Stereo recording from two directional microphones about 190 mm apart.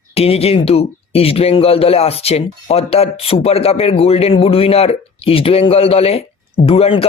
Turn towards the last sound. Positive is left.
turn(degrees=30)  # may be behind; listen again after turning